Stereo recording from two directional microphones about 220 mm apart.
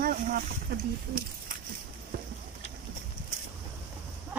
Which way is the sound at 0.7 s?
45° right (ahead or behind).